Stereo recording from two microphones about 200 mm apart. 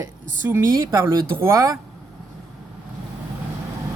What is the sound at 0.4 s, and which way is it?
Speech, 15° right (ahead or behind).